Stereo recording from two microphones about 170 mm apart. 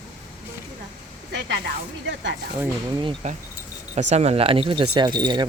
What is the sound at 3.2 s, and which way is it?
Speech, 40° right (ahead or behind).